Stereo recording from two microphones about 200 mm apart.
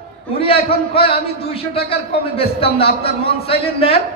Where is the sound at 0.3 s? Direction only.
30° left (ahead or behind).